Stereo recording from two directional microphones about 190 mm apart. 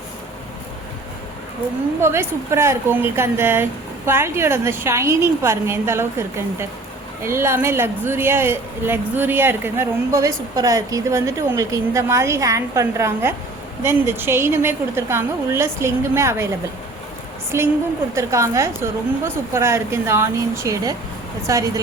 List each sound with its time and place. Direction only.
2.0 s a woman's voice: 15° right (ahead or behind)